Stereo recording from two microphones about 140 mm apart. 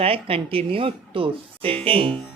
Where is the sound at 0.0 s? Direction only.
40° right (ahead or behind).